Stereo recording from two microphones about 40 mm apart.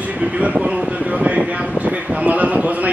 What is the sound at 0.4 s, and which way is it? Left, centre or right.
Speech, right.